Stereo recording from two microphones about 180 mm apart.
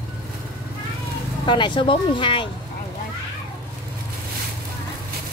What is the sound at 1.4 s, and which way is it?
Speech, 25° left (ahead or behind).